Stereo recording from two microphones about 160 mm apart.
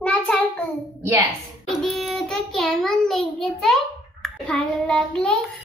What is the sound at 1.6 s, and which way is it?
A child's voice, centre (ahead or behind).